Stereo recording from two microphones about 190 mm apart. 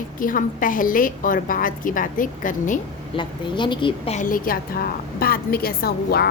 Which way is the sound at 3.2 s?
25° left (ahead or behind).